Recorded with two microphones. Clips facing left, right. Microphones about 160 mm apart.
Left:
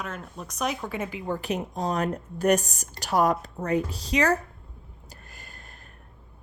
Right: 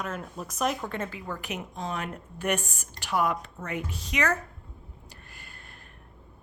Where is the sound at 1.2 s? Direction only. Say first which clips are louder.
Left 7 dB; 30° left (ahead or behind).